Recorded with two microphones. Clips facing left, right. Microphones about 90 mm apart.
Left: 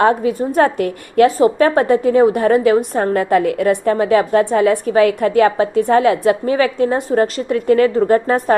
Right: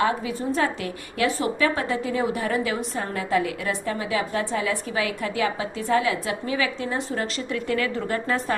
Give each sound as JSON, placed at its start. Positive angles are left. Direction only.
{"t": 0.0, "sound": "a woman's voice", "side_deg": 45}